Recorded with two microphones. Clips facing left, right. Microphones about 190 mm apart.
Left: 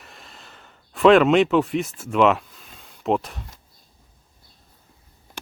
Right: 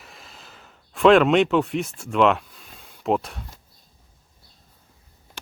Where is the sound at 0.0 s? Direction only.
Centre (ahead or behind).